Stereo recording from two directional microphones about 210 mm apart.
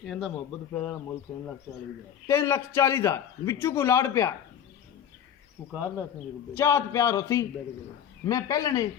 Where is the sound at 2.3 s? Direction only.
10° left (ahead or behind).